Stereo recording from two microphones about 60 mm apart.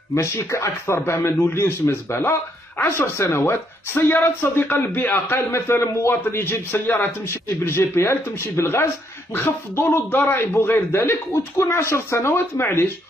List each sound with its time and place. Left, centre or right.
0.1 s a man's voice: left
11.3 s a man's voice: left